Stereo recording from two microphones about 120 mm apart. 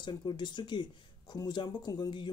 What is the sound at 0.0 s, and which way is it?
Speech, 35° left (ahead or behind).